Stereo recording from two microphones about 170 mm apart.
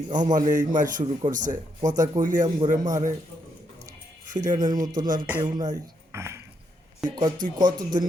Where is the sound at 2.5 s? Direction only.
25° right (ahead or behind).